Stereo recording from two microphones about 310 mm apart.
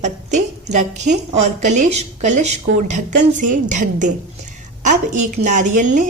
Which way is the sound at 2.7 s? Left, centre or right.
Right.